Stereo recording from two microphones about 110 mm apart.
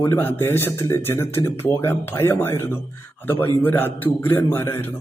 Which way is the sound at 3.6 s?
15° left (ahead or behind).